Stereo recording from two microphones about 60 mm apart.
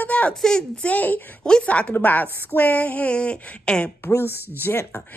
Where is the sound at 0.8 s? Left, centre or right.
Left.